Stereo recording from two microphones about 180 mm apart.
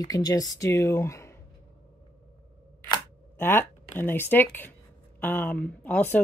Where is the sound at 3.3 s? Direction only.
10° left (ahead or behind).